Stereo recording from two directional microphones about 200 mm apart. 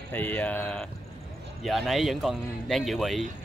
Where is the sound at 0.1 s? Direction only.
10° left (ahead or behind).